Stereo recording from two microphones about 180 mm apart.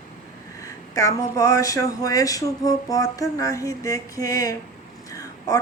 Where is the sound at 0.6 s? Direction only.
20° left (ahead or behind).